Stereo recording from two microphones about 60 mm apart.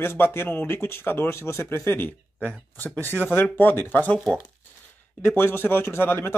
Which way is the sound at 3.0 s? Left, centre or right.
Left.